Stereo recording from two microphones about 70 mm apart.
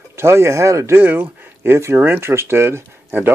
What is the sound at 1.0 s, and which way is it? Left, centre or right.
Speech, right.